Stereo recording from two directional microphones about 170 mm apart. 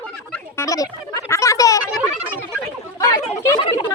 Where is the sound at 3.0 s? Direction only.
20° left (ahead or behind).